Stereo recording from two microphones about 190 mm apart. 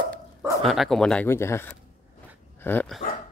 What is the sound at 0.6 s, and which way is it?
Speech, centre (ahead or behind).